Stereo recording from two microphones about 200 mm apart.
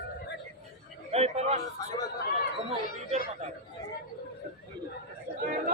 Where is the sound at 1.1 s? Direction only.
30° right (ahead or behind).